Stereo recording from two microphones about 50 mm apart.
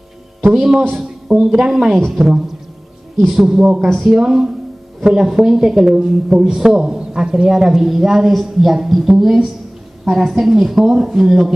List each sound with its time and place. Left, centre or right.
0.5 s a woman's voice: centre
3.4 s a woman's voice: right